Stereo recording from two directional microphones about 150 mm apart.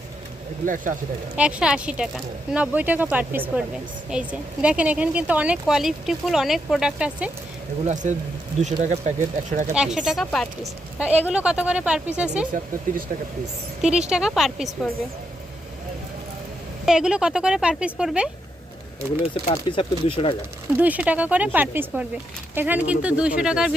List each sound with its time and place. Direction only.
0.6 s speech: 60° right (ahead or behind)
1.4 s speech: 5° right (ahead or behind)
8.0 s speech: 55° right (ahead or behind)
9.7 s speech: 5° right (ahead or behind)
11.0 s speech: 10° right (ahead or behind)
12.9 s speech: 65° right (ahead or behind)
13.8 s speech: 5° right (ahead or behind)
16.8 s speech: 5° right (ahead or behind)
19.7 s speech: 35° left (ahead or behind)
20.7 s speech: 10° right (ahead or behind)